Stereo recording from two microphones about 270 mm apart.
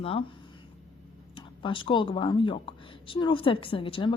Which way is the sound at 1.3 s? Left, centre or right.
Centre.